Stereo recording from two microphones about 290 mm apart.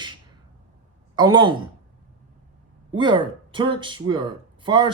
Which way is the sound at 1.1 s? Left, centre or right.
Centre.